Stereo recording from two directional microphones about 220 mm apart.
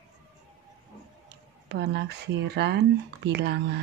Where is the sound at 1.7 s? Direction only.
50° right (ahead or behind).